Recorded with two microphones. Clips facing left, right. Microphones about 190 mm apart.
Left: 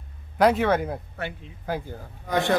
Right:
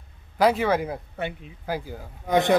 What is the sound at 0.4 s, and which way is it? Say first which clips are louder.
Speech: left 1 dB; centre (ahead or behind).